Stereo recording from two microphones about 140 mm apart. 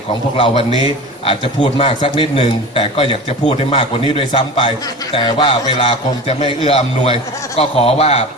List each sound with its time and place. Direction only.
0.1 s a man's voice: 40° left (ahead or behind)